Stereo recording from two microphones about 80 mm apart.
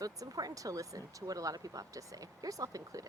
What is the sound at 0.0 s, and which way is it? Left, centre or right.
A woman's voice, right.